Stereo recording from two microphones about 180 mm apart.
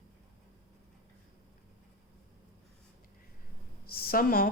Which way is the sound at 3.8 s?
55° left (ahead or behind).